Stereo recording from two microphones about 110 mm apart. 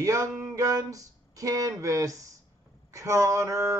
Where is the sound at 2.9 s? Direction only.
30° right (ahead or behind).